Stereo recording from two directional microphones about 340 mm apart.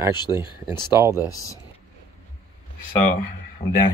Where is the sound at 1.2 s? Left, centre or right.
Centre.